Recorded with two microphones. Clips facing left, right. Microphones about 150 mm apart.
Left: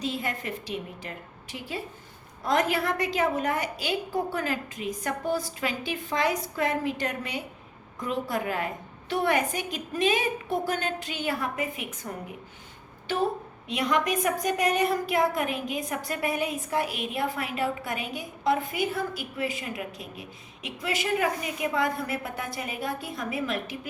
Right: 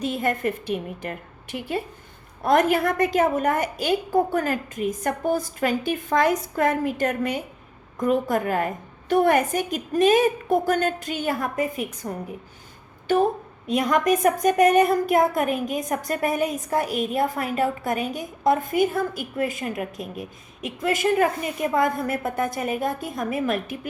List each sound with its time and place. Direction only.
0.0 s a woman's voice: 50° right (ahead or behind)
13.7 s a woman's voice: 45° right (ahead or behind)